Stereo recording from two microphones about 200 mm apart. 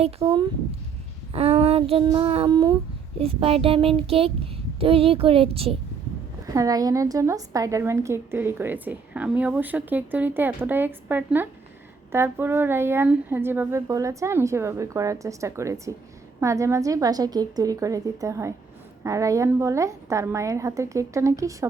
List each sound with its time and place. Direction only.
0.2 s speech: 30° right (ahead or behind)
6.4 s a woman's voice: 15° right (ahead or behind)